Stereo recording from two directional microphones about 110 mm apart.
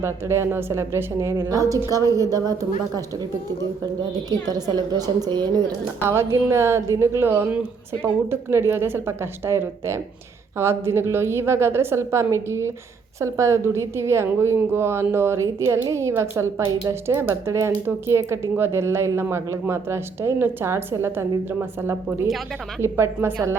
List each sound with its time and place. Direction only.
0.0 s a woman's voice: 25° right (ahead or behind)
4.3 s a woman's voice: 35° right (ahead or behind)
6.1 s speech: 25° right (ahead or behind)